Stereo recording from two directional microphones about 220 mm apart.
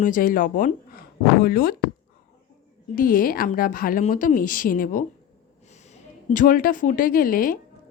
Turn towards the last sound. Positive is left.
turn(degrees=40)  # may be behind; listen again after turning